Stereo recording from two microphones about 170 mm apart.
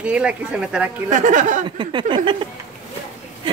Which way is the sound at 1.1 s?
50° right (ahead or behind).